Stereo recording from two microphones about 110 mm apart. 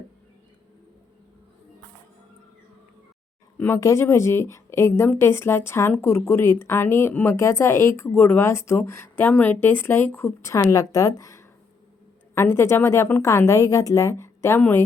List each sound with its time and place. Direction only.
3.6 s a woman's voice: 25° left (ahead or behind)